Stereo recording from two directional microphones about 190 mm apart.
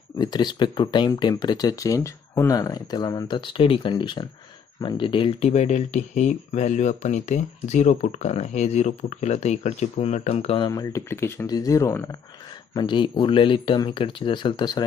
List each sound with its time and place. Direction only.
0.2 s speech: 20° left (ahead or behind)